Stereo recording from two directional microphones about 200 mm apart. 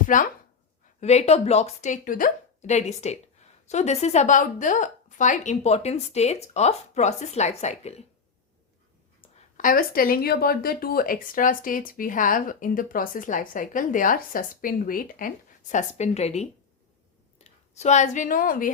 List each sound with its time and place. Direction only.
0.1 s a woman's voice: 40° left (ahead or behind)
9.6 s a woman's voice: 45° left (ahead or behind)